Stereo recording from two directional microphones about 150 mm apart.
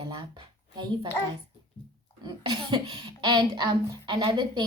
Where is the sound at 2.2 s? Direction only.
30° right (ahead or behind).